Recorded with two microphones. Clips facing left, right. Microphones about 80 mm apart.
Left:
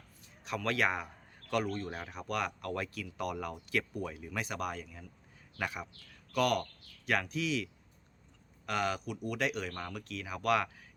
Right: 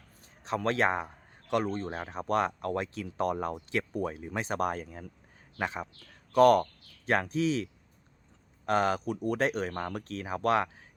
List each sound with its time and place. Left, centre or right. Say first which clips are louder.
0.4 s speech: right 4 dB; right
5.5 s speech: right 4 dB; right